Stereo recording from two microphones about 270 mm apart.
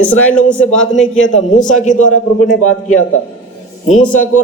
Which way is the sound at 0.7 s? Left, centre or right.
Centre.